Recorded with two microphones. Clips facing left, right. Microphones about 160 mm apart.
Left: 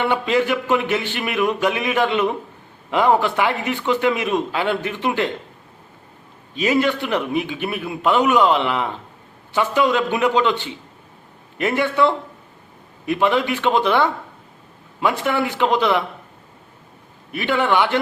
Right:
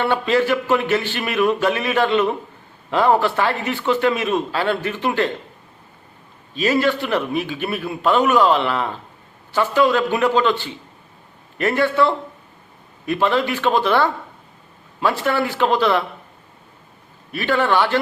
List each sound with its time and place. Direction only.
0.0 s a man's voice: 15° left (ahead or behind)
6.5 s a man's voice: 20° left (ahead or behind)
17.3 s a man's voice: 15° left (ahead or behind)